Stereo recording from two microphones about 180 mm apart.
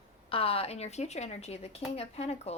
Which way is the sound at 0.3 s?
30° left (ahead or behind).